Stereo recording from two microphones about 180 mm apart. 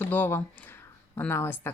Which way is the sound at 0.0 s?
10° left (ahead or behind).